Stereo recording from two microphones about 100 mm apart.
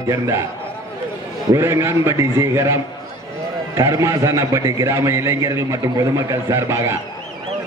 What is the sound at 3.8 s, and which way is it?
A man's voice, 30° right (ahead or behind).